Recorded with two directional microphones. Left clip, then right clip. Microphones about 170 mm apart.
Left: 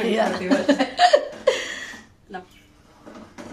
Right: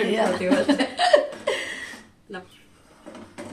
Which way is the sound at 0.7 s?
20° left (ahead or behind).